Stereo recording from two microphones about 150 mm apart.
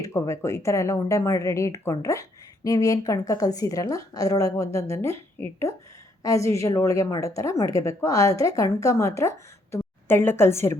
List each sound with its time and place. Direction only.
0.0 s a woman's voice: 20° left (ahead or behind)